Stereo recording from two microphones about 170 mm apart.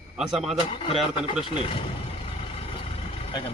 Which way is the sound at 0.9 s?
35° left (ahead or behind).